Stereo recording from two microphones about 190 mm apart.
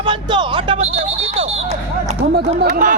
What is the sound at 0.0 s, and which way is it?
Speech, 25° right (ahead or behind).